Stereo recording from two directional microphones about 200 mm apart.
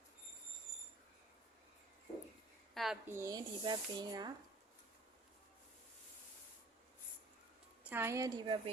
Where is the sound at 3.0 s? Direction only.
15° right (ahead or behind).